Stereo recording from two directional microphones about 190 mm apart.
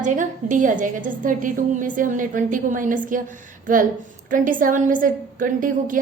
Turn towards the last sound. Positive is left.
turn(degrees=-45)  # may be behind; listen again after turning